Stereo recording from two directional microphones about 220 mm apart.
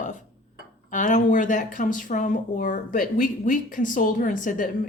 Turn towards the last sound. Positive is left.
turn(degrees=35)  # may be behind; listen again after turning